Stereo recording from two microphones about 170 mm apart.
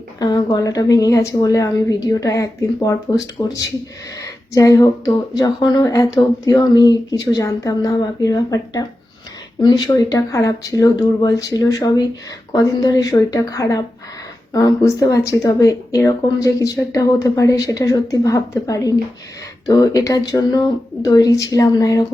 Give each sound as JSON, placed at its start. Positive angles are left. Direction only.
{"t": 0.2, "sound": "speech", "side_deg": 25}